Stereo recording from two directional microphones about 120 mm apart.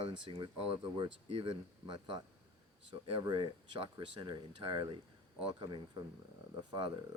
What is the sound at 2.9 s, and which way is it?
Speech, 50° right (ahead or behind).